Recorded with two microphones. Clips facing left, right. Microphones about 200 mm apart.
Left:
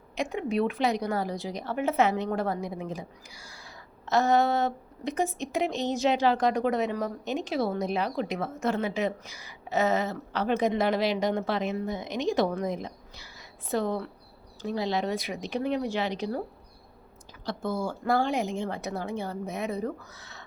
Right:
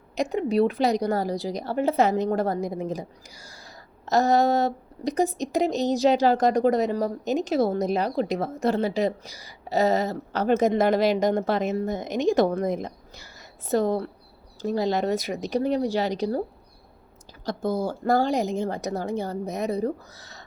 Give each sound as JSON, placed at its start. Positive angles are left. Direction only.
{"t": 0.2, "sound": "a woman's voice", "side_deg": -40}
{"t": 17.4, "sound": "a woman's voice", "side_deg": -40}